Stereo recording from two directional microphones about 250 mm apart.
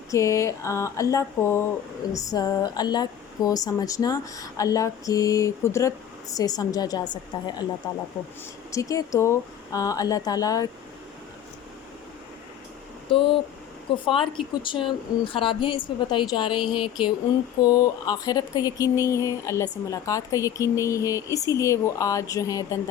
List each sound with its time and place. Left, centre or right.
0.1 s speech: centre
8.7 s speech: centre
13.1 s speech: left